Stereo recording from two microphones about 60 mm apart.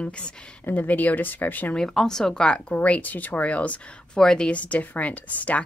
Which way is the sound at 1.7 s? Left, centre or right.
Centre.